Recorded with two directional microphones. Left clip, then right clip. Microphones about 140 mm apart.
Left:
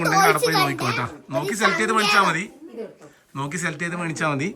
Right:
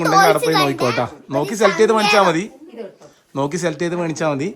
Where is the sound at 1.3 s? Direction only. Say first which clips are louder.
Right 4 dB; 30° right (ahead or behind).